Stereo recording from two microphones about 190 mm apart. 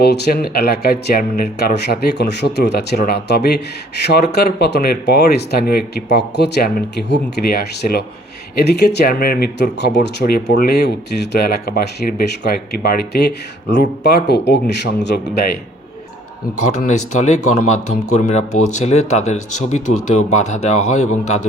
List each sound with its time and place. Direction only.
0.0 s speech: 55° left (ahead or behind)
16.7 s a man's voice: 40° left (ahead or behind)